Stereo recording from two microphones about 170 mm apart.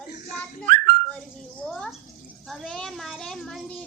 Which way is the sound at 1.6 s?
Centre (ahead or behind).